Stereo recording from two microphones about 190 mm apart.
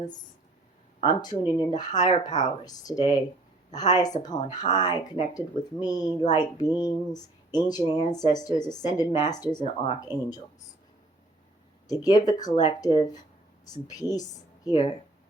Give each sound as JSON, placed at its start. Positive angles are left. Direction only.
{"t": 1.0, "sound": "speech", "side_deg": 20}
{"t": 11.9, "sound": "a woman's voice", "side_deg": 20}